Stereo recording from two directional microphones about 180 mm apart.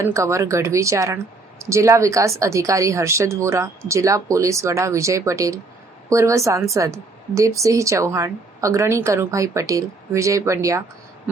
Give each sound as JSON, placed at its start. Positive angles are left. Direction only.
{"t": 0.0, "sound": "a woman's voice", "side_deg": -15}